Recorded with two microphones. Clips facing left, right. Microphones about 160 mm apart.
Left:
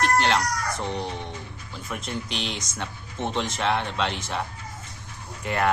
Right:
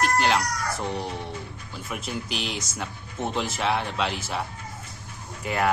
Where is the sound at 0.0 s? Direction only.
5° right (ahead or behind).